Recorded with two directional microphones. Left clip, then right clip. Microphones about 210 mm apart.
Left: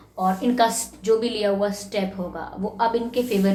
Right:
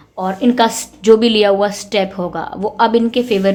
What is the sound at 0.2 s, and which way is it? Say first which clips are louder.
A woman's voice: right 6 dB; 45° right (ahead or behind).